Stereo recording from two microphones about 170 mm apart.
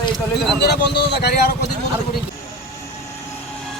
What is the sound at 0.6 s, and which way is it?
Speech, 75° left (ahead or behind).